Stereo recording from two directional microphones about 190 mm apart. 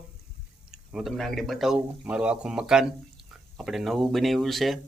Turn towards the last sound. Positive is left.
turn(degrees=0)  # may be behind; listen again after turning